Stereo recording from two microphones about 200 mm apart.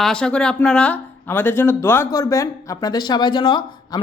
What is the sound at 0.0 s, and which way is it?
Speech, 5° left (ahead or behind).